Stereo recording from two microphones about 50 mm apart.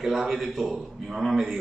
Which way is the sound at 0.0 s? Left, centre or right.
Centre.